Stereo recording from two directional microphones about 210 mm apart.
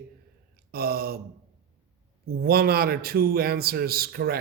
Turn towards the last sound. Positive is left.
turn(degrees=-45)  # may be behind; listen again after turning